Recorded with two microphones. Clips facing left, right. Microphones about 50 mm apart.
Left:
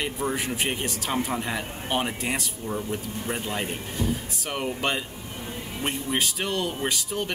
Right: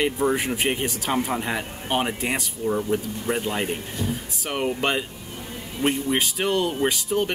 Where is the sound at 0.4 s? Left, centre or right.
Centre.